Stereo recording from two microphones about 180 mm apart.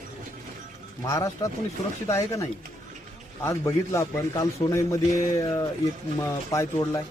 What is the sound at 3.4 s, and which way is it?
A man's voice, 15° left (ahead or behind).